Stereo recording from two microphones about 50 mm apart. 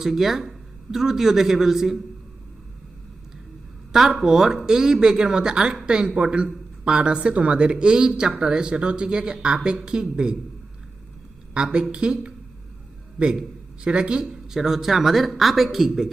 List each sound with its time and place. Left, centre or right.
0.0 s speech: centre
3.9 s speech: centre
11.5 s speech: right
13.8 s speech: right; by 16.1 s centre